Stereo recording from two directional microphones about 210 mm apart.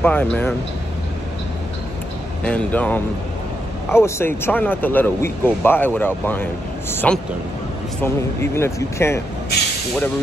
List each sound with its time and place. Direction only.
0.0 s speech: 5° left (ahead or behind)
2.4 s speech: 5° left (ahead or behind)